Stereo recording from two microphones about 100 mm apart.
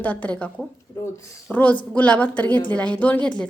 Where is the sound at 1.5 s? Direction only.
15° left (ahead or behind).